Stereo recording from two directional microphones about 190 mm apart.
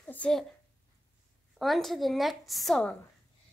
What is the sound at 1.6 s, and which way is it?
A woman's voice, centre (ahead or behind).